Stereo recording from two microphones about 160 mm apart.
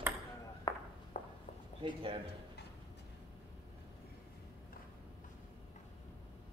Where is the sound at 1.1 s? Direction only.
45° left (ahead or behind).